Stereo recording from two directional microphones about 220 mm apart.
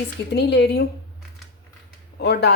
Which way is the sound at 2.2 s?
50° left (ahead or behind).